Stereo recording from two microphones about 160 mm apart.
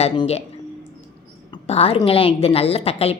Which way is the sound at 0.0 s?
40° left (ahead or behind).